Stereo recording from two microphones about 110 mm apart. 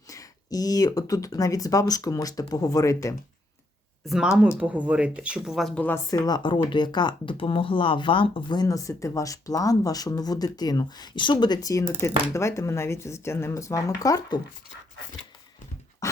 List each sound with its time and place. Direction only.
0.1 s speech: 30° left (ahead or behind)
4.0 s speech: 5° right (ahead or behind)
5.5 s speech: 5° left (ahead or behind)
6.1 s speech: 40° left (ahead or behind)
8.6 s speech: 30° left (ahead or behind)